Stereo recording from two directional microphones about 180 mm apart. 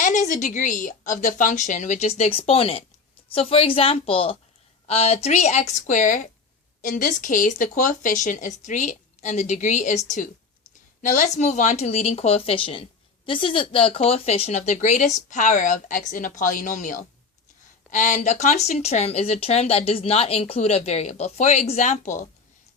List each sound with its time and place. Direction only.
0.0 s speech: 45° left (ahead or behind)
11.0 s speech: 45° left (ahead or behind)